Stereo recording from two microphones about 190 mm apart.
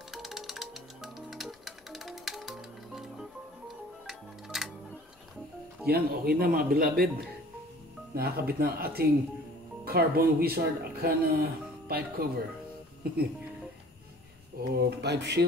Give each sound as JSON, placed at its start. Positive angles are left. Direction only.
{"t": 0.1, "sound": "music", "side_deg": 0}
{"t": 5.9, "sound": "speech", "side_deg": -55}
{"t": 14.7, "sound": "speech", "side_deg": -60}